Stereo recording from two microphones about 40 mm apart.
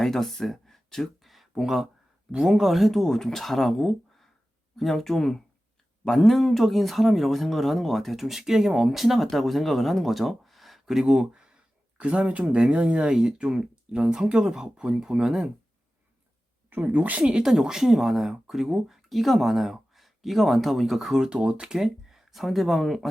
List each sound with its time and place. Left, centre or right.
0.0 s speech: centre
1.2 s a sound: centre
1.5 s speech: centre
2.6 s speech: centre
11.0 s speech: centre
11.9 s speech: right; by 15.5 s centre
16.6 s speech: right
17.4 s speech: centre
21.1 s speech: centre
22.1 s speech: centre